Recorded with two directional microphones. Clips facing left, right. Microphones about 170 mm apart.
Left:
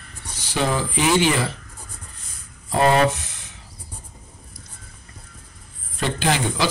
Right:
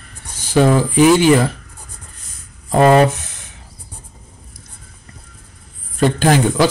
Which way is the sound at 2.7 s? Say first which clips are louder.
Right 6 dB; 45° right (ahead or behind).